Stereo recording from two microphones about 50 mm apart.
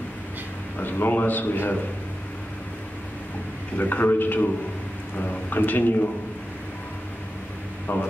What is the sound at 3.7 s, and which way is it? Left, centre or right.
A man's voice, left.